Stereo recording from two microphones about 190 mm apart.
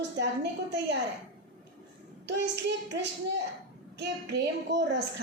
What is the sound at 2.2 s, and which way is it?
A woman's voice, 65° right (ahead or behind).